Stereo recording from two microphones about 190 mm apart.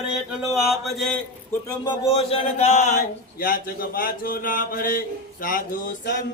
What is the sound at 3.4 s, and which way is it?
Speech, 50° left (ahead or behind).